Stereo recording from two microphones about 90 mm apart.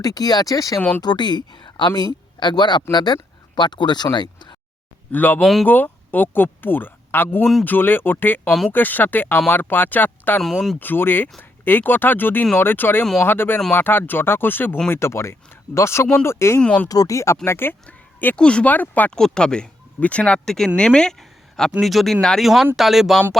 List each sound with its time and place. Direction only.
0.0 s speech: 45° left (ahead or behind)
0.8 s speech: 20° left (ahead or behind)
1.0 s speech: 55° left (ahead or behind)
5.1 s speech: 20° left (ahead or behind)
5.4 s speech: centre (ahead or behind)
5.6 s speech: 20° left (ahead or behind)
8.4 s speech: centre (ahead or behind)
8.7 s speech: 20° left (ahead or behind)
10.4 s speech: 5° left (ahead or behind)
10.8 s speech: 20° left (ahead or behind)
16.6 s speech: 15° left (ahead or behind)
16.9 s speech: 40° left (ahead or behind); by 23.2 s centre (ahead or behind)